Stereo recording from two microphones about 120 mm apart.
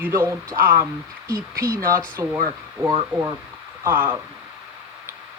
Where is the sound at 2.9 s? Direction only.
30° right (ahead or behind).